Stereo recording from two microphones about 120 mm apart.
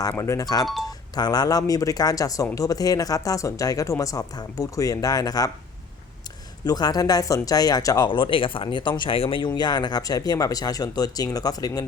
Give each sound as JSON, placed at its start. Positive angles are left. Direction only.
{"t": 0.1, "sound": "speech", "side_deg": 25}
{"t": 6.7, "sound": "speech", "side_deg": 35}
{"t": 9.6, "sound": "speech", "side_deg": 35}